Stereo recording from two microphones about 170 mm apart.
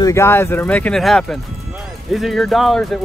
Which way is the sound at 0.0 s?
15° left (ahead or behind).